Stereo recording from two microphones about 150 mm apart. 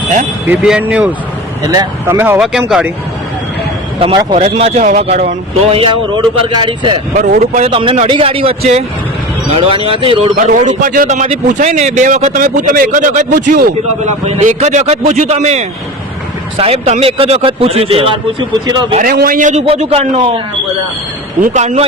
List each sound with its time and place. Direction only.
0.4 s speech: 5° right (ahead or behind)
1.6 s speech: 25° right (ahead or behind)
2.4 s speech: 5° right (ahead or behind)
4.0 s a man's voice: 30° right (ahead or behind)
4.4 s a man's voice: 45° right (ahead or behind)
5.7 s a man's voice: 35° right (ahead or behind)
7.1 s a man's voice: 55° right (ahead or behind)
7.7 s a man's voice: 35° right (ahead or behind)
10.4 s a man's voice: 55° right (ahead or behind)
14.3 s a man's voice: 50° right (ahead or behind); by 18.9 s 30° right (ahead or behind)
18.9 s a man's voice: 75° right (ahead or behind); by 19.6 s 55° right (ahead or behind)
19.6 s a man's voice: 40° right (ahead or behind)
21.4 s a man's voice: 50° right (ahead or behind)